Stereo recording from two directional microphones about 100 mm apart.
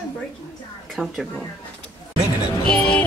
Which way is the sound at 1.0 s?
5° right (ahead or behind).